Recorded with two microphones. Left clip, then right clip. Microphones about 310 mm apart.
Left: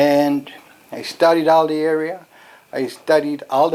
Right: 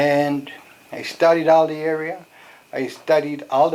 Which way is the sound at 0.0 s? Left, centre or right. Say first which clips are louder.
Left 3 dB; left.